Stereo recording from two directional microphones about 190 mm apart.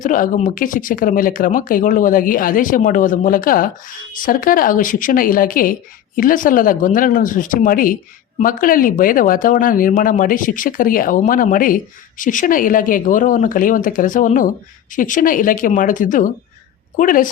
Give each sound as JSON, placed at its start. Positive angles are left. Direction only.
{"t": 0.0, "sound": "speech", "side_deg": 45}